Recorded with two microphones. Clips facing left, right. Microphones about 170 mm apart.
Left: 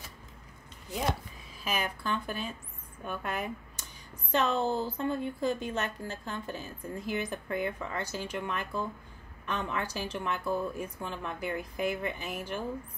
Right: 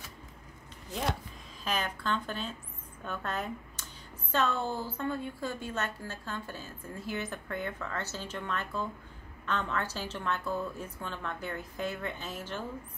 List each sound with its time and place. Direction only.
1.6 s a woman's voice: 10° left (ahead or behind)